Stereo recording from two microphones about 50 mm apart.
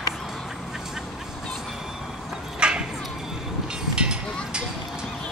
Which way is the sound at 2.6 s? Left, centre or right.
Centre.